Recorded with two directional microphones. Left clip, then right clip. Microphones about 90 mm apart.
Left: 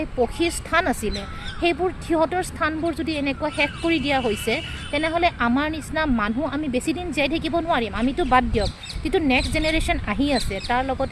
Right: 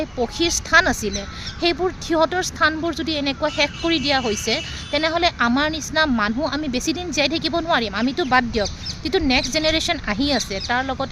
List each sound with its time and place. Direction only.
0.0 s speech: 50° right (ahead or behind)